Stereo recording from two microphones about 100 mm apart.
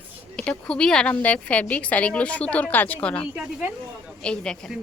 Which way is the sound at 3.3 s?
10° right (ahead or behind).